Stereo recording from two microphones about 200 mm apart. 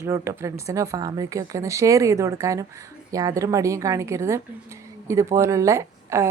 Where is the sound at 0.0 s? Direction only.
15° right (ahead or behind).